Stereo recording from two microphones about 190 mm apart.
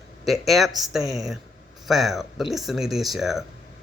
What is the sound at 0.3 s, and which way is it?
Speech, centre (ahead or behind).